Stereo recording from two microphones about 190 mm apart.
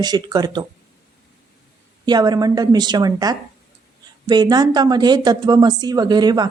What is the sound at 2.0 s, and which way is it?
Speech, 20° right (ahead or behind).